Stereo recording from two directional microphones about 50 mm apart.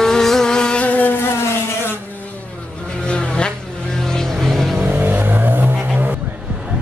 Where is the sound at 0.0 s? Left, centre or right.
Centre.